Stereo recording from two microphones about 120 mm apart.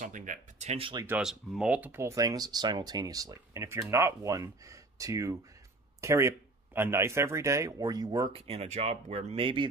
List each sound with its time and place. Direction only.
0.0 s speech: 90° right
0.7 s speech: 45° right (ahead or behind)
1.2 s speech: 5° right (ahead or behind); by 8.3 s 30° right (ahead or behind)
8.3 s speech: 60° right (ahead or behind)